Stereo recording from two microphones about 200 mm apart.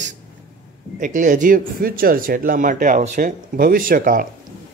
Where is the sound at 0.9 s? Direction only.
40° right (ahead or behind).